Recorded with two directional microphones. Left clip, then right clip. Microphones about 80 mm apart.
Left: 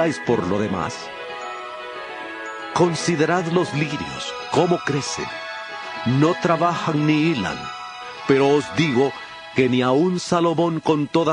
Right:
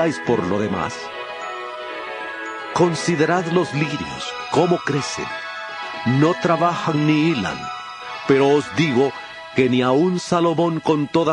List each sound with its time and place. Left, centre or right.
0.0 s speech: right
0.4 s speech: right
2.7 s speech: right
6.0 s speech: right